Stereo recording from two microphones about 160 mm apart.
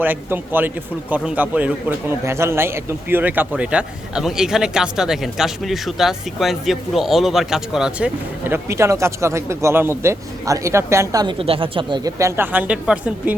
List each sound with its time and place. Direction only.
0.0 s a man's voice: 10° right (ahead or behind)
11.3 s speech: 35° right (ahead or behind); by 13.3 s 5° right (ahead or behind)